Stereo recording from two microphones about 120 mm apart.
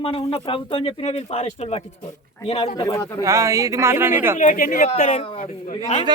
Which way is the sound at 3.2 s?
25° right (ahead or behind).